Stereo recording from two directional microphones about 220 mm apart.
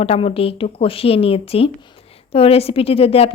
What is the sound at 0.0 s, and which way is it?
A woman's voice, 25° left (ahead or behind).